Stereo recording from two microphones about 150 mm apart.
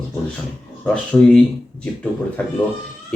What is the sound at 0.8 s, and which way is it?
Speech, 5° left (ahead or behind).